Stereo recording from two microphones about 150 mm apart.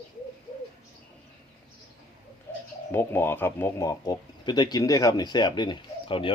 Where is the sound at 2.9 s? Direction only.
15° left (ahead or behind).